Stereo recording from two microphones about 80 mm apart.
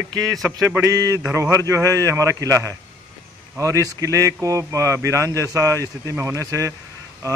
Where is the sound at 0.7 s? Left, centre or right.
Right.